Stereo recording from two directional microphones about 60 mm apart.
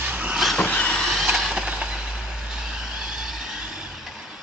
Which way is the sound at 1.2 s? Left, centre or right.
Centre.